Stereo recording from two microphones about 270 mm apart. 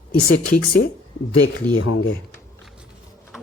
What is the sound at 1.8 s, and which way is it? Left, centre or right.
Speech, left.